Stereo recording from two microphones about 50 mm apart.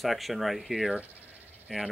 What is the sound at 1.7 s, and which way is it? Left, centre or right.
Speech, centre.